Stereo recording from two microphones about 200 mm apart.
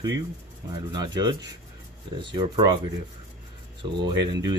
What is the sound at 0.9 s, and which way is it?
Speech, 20° right (ahead or behind).